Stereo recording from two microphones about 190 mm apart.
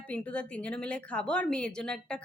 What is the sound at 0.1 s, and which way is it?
A woman's voice, 5° left (ahead or behind).